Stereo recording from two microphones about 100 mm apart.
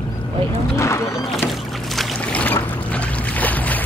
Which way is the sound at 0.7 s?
30° left (ahead or behind).